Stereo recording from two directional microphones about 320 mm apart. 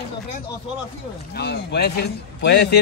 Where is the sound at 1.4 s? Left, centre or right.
Left.